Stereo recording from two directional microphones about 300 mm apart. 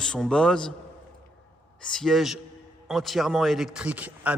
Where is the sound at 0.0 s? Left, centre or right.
Centre.